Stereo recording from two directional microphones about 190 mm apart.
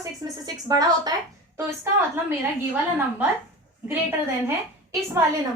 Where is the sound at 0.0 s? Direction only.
20° right (ahead or behind).